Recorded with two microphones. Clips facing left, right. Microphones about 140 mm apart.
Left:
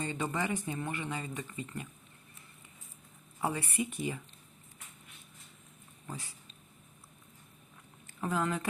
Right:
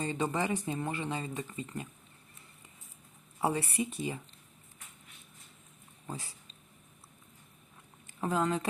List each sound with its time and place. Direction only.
0.0 s speech: 25° right (ahead or behind)
3.4 s speech: 30° right (ahead or behind)
6.1 s speech: 25° right (ahead or behind)
8.2 s speech: 25° right (ahead or behind)